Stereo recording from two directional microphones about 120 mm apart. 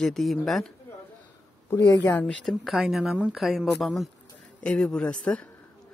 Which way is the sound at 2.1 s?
15° left (ahead or behind).